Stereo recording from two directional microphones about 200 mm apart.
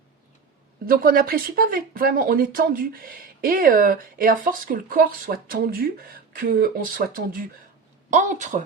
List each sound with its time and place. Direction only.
0.9 s a woman's voice: 45° right (ahead or behind)